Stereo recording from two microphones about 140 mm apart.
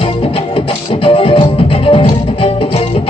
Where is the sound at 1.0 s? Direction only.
40° left (ahead or behind).